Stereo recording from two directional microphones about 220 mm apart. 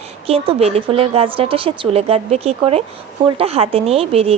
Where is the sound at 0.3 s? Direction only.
25° right (ahead or behind).